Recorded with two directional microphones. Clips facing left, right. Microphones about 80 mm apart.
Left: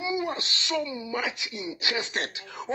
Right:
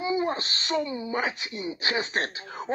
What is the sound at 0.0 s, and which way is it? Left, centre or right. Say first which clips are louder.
Speech: right 3 dB; right.